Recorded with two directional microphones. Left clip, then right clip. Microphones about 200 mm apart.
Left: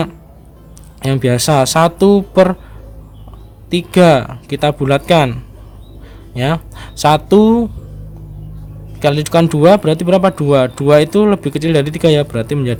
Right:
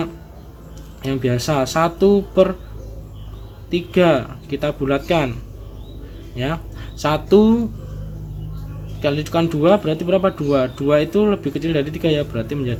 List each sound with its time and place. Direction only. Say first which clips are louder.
1.0 s speech: left 6 dB; 40° left (ahead or behind)
3.7 s speech: left 6 dB; 40° left (ahead or behind)
9.0 s speech: left 7 dB; 40° left (ahead or behind)